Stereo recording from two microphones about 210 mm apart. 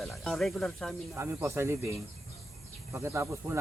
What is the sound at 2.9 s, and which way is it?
Speech, 10° right (ahead or behind).